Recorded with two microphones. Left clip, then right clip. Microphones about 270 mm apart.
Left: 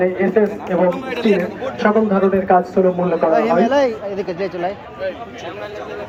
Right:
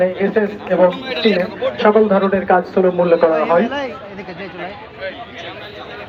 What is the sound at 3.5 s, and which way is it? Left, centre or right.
Speech, left.